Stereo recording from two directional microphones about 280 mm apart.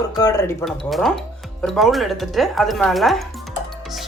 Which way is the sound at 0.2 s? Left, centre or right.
Centre.